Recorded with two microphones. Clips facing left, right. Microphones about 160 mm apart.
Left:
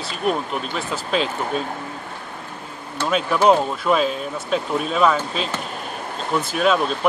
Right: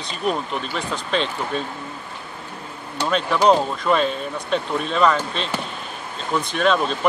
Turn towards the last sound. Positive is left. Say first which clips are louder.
# left 1 dB
turn(degrees=5)  # may be behind; listen again after turning